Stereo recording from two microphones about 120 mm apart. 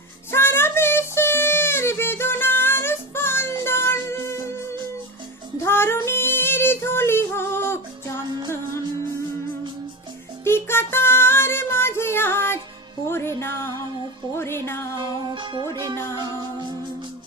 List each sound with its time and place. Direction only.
0.3 s child singing: 20° left (ahead or behind)
3.6 s music: 20° left (ahead or behind)
5.5 s female singing: 20° left (ahead or behind)
10.4 s music: 20° left (ahead or behind)
14.9 s music: 35° right (ahead or behind)